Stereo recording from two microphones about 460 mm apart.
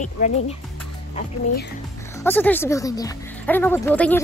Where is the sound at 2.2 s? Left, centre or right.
Centre.